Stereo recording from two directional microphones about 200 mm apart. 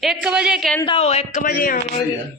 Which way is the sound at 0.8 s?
30° left (ahead or behind).